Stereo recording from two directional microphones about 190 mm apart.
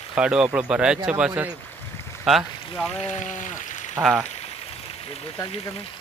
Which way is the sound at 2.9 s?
35° left (ahead or behind).